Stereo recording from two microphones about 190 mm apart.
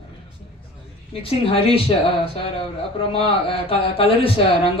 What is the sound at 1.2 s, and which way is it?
Speech, 30° left (ahead or behind).